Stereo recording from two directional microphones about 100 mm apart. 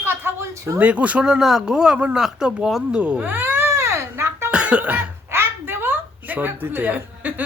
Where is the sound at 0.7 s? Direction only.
15° right (ahead or behind).